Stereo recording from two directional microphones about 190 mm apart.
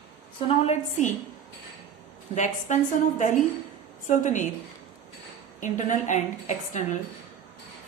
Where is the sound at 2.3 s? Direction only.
40° left (ahead or behind).